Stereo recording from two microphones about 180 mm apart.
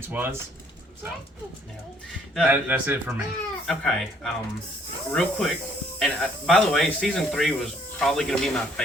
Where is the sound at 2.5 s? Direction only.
10° right (ahead or behind).